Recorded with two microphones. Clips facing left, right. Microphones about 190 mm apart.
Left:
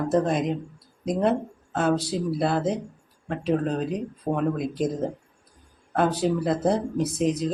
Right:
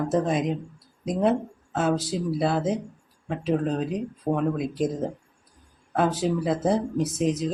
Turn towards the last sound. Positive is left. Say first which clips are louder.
# left 1 dB
turn(degrees=0)  # may be behind; listen again after turning